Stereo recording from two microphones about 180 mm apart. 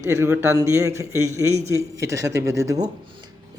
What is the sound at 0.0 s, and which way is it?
Speech, 15° right (ahead or behind).